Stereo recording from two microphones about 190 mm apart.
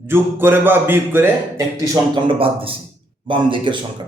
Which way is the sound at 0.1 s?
10° right (ahead or behind).